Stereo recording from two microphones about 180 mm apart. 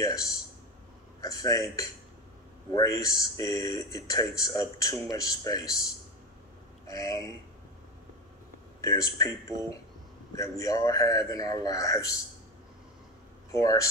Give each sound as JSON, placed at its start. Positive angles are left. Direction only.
{"t": 0.0, "sound": "speech", "side_deg": 20}
{"t": 6.9, "sound": "speech", "side_deg": 20}
{"t": 8.8, "sound": "speech", "side_deg": 20}
{"t": 13.5, "sound": "speech", "side_deg": 20}